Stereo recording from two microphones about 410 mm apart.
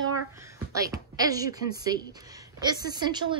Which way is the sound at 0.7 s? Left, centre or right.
Centre.